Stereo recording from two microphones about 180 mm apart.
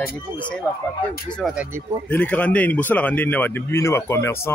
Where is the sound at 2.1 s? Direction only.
10° left (ahead or behind).